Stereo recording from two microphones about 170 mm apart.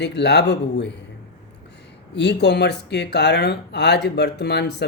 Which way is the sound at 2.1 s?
90° left.